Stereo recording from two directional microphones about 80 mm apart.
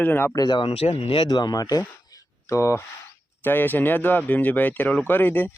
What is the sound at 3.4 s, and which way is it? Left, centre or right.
Speech, left.